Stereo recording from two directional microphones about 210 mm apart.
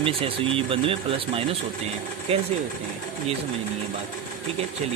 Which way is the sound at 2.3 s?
30° right (ahead or behind).